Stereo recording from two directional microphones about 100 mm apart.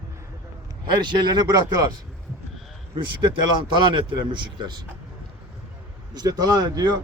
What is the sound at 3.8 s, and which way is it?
A man's voice, 50° right (ahead or behind).